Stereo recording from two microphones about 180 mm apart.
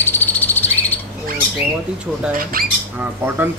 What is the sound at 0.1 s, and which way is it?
Frog, 10° left (ahead or behind).